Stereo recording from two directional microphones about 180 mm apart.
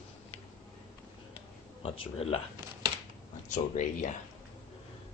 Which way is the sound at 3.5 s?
45° left (ahead or behind).